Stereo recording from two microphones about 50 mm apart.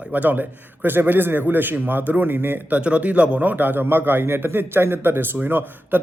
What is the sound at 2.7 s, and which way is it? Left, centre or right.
A man's voice, right.